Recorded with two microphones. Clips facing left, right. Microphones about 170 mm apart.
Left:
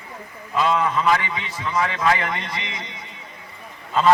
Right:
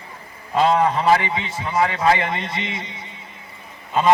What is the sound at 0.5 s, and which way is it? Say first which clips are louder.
A man's voice: right 3 dB; 35° right (ahead or behind).